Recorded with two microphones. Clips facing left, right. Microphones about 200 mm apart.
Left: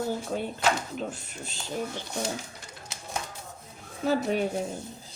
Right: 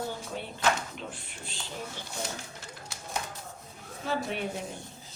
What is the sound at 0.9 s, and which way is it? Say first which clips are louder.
Speech: left 7 dB; 45° left (ahead or behind).